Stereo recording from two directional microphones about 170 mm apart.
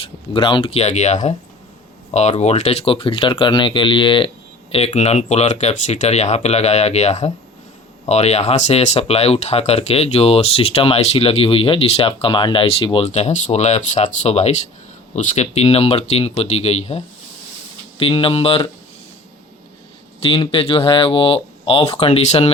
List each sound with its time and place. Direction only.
0.3 s speech: 30° left (ahead or behind)
2.4 s speech: 40° left (ahead or behind)
18.0 s speech: 35° left (ahead or behind)
20.2 s speech: 35° left (ahead or behind)